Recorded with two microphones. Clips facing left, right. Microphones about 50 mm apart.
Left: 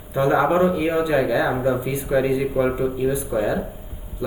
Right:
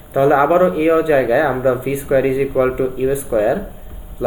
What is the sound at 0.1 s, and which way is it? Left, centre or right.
Speech, right.